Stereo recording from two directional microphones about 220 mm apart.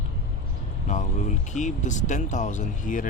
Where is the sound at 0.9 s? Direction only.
35° left (ahead or behind).